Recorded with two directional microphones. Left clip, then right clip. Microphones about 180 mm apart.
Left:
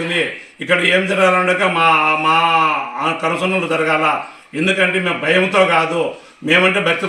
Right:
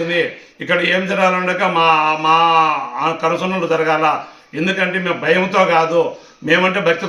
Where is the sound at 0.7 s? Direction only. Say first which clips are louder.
Left 2 dB; 5° right (ahead or behind).